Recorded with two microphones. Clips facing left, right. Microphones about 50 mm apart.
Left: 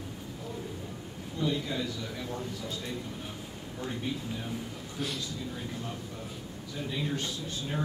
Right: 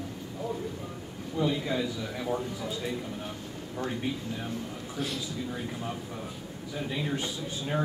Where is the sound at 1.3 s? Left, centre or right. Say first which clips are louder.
Right 3 dB; centre.